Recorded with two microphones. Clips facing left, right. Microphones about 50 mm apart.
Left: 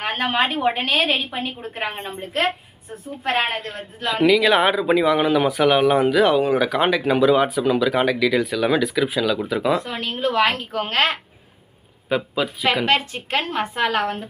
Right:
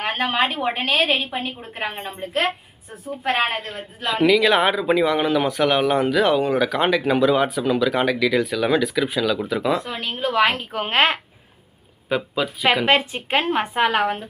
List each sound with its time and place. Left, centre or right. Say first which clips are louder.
0.0 s a woman's voice: even; centre; by 11.2 s right
12.0 s a woman's voice: left 1 dB; centre